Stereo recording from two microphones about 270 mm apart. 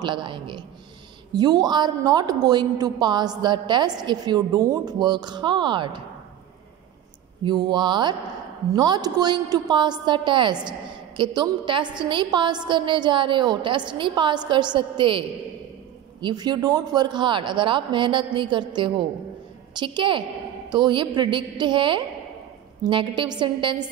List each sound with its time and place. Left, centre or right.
0.0 s a woman's voice: centre
7.4 s a woman's voice: centre